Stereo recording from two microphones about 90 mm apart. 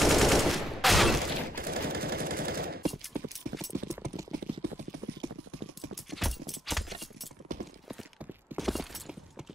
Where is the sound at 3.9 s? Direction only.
35° right (ahead or behind).